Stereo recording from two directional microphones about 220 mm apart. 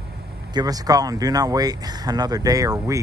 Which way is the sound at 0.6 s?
15° right (ahead or behind).